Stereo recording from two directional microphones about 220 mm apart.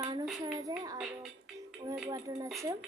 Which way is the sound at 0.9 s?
5° right (ahead or behind).